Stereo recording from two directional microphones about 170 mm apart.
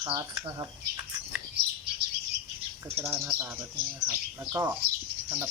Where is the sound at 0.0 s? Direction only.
20° right (ahead or behind).